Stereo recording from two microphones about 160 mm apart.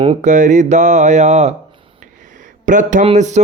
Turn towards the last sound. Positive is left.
turn(degrees=-45)  # may be behind; listen again after turning